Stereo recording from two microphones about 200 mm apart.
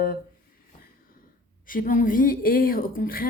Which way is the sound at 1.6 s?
45° left (ahead or behind).